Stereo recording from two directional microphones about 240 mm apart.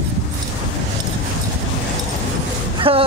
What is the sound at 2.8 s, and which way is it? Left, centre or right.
Music, right.